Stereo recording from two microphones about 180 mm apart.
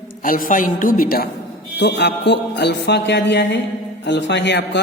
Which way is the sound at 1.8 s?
70° left (ahead or behind).